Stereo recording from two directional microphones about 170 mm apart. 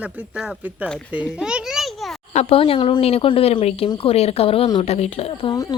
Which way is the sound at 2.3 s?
40° left (ahead or behind).